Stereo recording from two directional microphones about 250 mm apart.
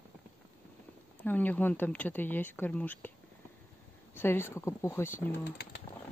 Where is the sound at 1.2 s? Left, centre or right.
Centre.